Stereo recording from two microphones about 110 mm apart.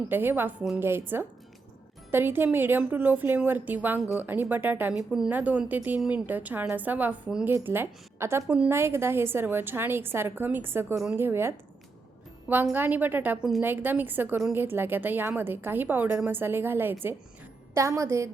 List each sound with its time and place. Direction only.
0.1 s a woman's voice: 20° right (ahead or behind)
4.9 s a woman's voice: 5° right (ahead or behind); by 8.4 s 25° right (ahead or behind)
8.4 s speech: 10° right (ahead or behind)
8.7 s a woman's voice: 25° right (ahead or behind)
12.7 s a woman's voice: 15° right (ahead or behind)